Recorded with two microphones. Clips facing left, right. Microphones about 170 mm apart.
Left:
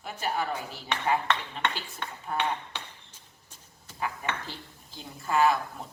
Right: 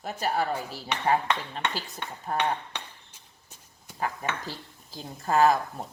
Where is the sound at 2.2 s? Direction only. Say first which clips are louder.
Right 2 dB; 40° right (ahead or behind).